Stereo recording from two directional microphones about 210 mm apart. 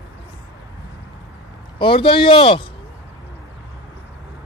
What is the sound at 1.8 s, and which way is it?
Speech, 25° left (ahead or behind).